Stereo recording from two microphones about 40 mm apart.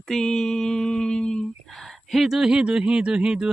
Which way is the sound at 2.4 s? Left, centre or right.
Right.